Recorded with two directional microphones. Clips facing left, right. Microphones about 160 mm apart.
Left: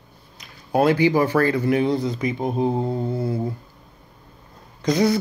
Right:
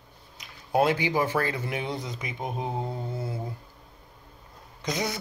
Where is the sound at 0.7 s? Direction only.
20° right (ahead or behind).